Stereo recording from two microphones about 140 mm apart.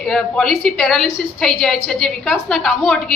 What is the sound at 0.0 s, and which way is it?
A woman's voice, centre (ahead or behind).